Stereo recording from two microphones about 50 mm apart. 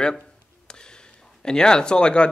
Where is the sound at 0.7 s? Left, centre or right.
Centre.